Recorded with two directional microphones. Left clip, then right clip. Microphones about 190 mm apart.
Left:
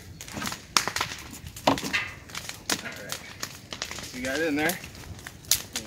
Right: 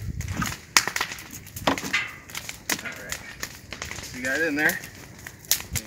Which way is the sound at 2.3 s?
50° right (ahead or behind).